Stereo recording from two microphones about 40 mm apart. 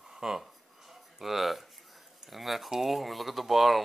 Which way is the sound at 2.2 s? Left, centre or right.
Centre.